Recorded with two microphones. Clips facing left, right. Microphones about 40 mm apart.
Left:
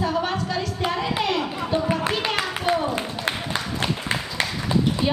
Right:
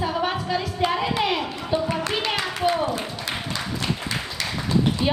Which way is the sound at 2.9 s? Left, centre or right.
Left.